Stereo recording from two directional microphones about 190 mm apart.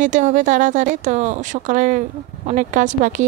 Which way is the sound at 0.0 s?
40° right (ahead or behind).